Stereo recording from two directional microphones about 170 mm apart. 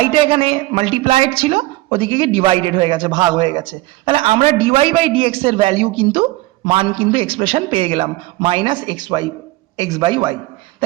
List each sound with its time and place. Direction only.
0.0 s speech: 30° right (ahead or behind)